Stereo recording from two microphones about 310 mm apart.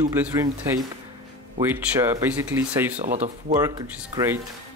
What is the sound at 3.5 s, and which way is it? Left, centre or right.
Speech, centre.